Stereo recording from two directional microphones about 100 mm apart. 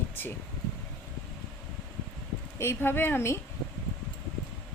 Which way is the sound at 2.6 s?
25° left (ahead or behind).